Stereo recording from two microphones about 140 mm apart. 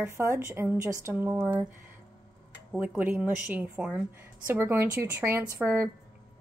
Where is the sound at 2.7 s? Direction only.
10° right (ahead or behind).